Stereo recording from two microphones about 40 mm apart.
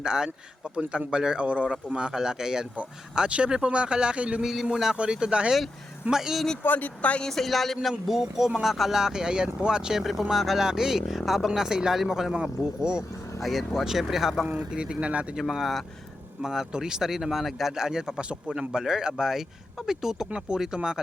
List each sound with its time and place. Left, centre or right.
0.0 s speech: centre
1.5 s speech: right
1.7 s speech: right
4.6 s speech: centre
6.6 s speech: left
7.3 s speech: centre
10.0 s speech: centre
13.4 s speech: centre
14.7 s speech: right
15.4 s speech: centre